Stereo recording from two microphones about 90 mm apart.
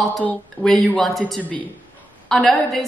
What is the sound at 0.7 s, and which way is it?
Speech, 5° left (ahead or behind).